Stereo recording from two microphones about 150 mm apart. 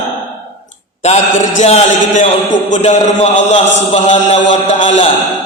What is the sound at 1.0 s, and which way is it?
A man's voice, 50° left (ahead or behind).